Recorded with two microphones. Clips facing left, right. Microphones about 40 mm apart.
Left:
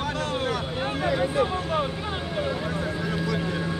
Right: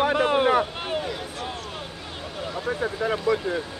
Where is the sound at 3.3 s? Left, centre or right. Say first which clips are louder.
Right 8 dB; centre.